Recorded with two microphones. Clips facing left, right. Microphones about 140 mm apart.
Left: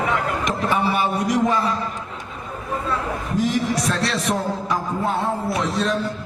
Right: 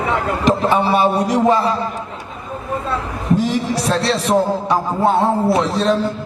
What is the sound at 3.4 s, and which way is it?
A man's voice, 30° right (ahead or behind).